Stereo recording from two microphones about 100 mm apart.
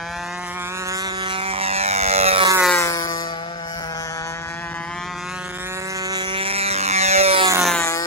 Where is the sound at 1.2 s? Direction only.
65° right (ahead or behind); by 2.4 s 90° right.